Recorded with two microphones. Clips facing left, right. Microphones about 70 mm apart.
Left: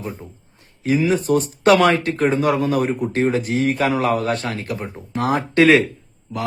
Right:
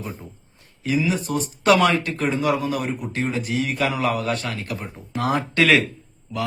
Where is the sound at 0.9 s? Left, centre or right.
Left.